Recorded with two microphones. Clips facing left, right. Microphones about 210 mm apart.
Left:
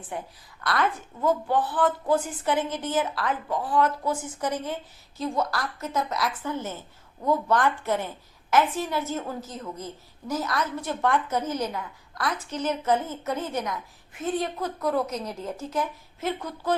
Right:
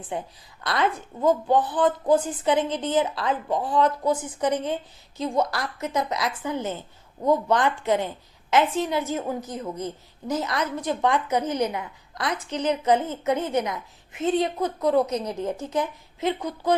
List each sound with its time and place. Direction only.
0.6 s a woman's voice: 20° right (ahead or behind)